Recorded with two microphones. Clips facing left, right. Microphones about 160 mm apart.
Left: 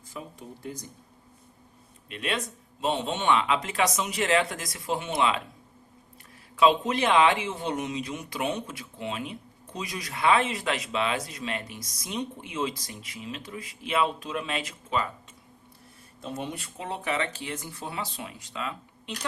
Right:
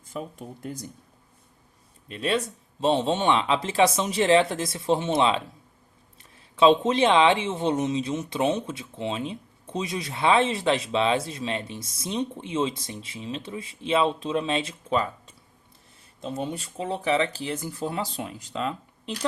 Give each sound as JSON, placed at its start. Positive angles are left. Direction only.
{"t": 2.0, "sound": "speech", "side_deg": -30}
{"t": 6.6, "sound": "speech", "side_deg": -25}
{"t": 16.2, "sound": "speech", "side_deg": -30}